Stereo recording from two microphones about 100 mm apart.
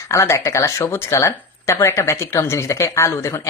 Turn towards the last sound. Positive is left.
turn(degrees=30)  # may be behind; listen again after turning